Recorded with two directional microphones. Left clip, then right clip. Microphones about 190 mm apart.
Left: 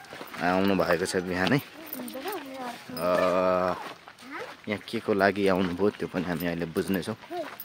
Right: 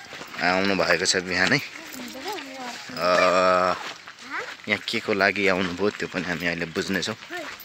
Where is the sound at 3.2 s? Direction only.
5° left (ahead or behind).